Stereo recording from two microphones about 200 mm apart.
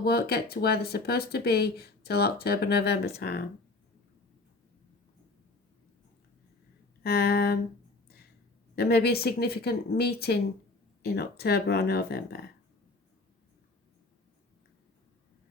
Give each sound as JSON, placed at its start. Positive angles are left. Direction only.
{"t": 0.0, "sound": "speech", "side_deg": 50}
{"t": 7.0, "sound": "speech", "side_deg": 50}
{"t": 8.7, "sound": "speech", "side_deg": 55}